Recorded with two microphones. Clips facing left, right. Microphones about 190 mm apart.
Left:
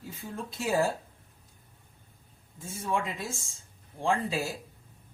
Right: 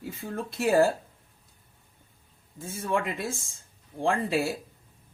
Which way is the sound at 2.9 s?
65° right (ahead or behind).